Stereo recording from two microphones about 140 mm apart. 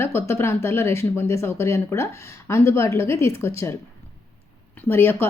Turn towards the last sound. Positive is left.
turn(degrees=15)  # may be behind; listen again after turning